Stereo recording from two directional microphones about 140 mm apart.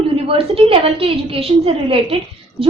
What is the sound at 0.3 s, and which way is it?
A woman's voice, 40° right (ahead or behind).